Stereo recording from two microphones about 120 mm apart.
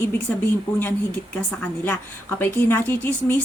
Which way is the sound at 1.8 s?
15° left (ahead or behind).